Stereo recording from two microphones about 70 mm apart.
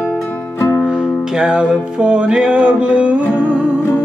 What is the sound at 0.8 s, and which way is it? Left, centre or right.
Music, centre.